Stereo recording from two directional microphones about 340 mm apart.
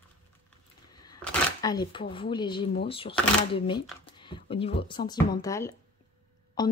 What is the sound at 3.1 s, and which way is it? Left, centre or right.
Speech, centre.